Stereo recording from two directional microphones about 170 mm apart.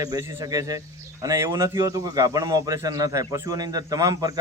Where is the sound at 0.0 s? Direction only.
20° right (ahead or behind).